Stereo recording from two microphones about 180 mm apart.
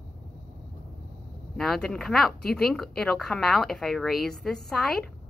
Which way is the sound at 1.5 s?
Centre (ahead or behind).